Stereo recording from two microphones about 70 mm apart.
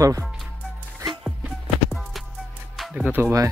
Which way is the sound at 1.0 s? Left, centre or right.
Right.